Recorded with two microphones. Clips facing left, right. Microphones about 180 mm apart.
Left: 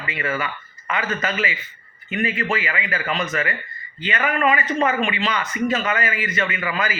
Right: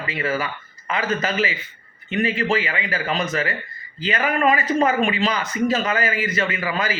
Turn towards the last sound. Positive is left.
turn(degrees=-35)  # may be behind; listen again after turning